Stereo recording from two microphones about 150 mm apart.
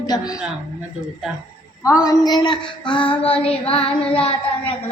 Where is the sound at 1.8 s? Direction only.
20° left (ahead or behind).